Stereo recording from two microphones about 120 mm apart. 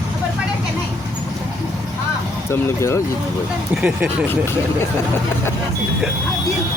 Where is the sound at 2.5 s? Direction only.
25° left (ahead or behind).